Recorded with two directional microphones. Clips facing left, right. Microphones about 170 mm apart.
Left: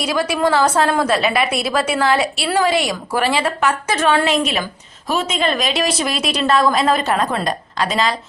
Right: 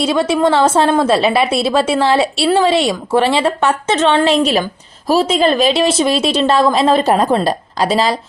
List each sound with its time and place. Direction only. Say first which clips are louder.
0.0 s a woman's voice: right 5 dB; 25° right (ahead or behind)